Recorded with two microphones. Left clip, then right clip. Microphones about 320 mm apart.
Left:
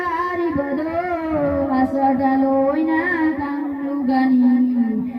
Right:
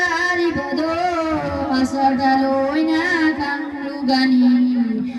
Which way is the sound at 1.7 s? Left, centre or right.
Right.